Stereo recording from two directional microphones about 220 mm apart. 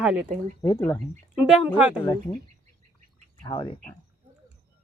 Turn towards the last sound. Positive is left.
turn(degrees=20)  # may be behind; listen again after turning